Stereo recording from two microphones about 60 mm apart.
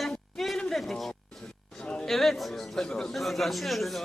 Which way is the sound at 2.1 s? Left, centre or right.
Centre.